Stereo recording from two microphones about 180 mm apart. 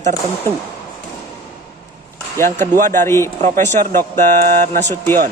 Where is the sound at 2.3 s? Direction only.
15° left (ahead or behind).